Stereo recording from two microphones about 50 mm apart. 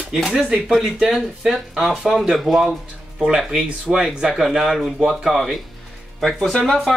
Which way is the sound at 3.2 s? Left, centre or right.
Centre.